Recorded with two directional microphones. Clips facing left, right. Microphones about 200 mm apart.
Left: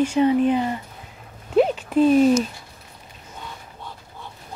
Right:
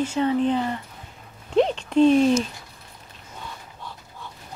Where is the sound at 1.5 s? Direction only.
5° left (ahead or behind).